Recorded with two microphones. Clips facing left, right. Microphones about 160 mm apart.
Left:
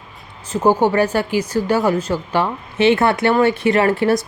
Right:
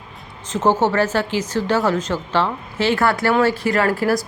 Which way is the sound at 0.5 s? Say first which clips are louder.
Left 2 dB; 10° left (ahead or behind).